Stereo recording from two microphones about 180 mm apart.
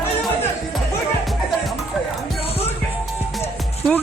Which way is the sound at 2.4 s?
35° left (ahead or behind).